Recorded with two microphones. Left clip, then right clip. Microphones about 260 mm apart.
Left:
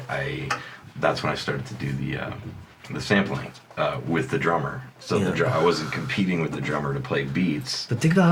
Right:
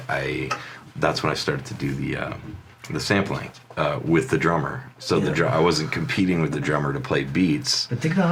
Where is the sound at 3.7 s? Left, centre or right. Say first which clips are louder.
Right 3 dB; right.